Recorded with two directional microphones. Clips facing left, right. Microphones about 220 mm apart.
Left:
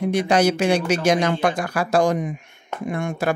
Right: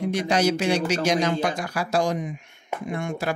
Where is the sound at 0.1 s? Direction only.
55° left (ahead or behind).